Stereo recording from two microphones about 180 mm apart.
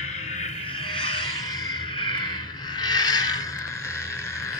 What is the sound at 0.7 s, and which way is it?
Music, 30° left (ahead or behind).